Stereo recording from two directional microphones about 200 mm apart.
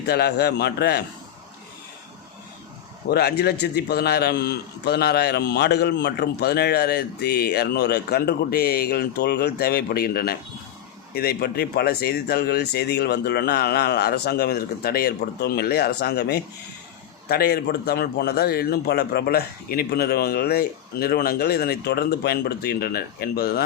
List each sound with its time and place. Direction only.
0.1 s a man's voice: 55° left (ahead or behind)
3.1 s a man's voice: 50° left (ahead or behind)